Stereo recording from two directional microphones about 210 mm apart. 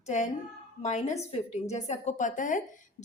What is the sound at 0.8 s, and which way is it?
A woman's voice, 35° left (ahead or behind).